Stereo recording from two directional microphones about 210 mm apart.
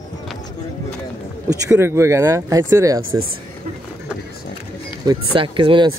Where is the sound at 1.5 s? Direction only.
15° right (ahead or behind).